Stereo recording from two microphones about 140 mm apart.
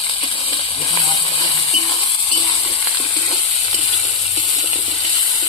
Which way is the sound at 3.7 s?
45° left (ahead or behind).